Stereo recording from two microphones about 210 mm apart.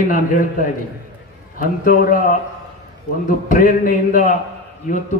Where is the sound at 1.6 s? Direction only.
40° left (ahead or behind).